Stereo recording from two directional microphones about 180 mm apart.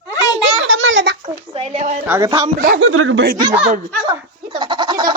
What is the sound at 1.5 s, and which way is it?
Speech, 35° right (ahead or behind).